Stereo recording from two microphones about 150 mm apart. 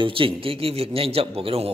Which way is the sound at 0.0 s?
35° right (ahead or behind).